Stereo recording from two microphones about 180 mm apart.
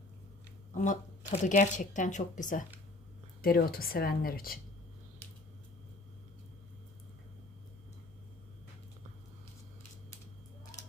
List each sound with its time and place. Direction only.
0.7 s speech: 45° left (ahead or behind)
3.4 s speech: 55° left (ahead or behind)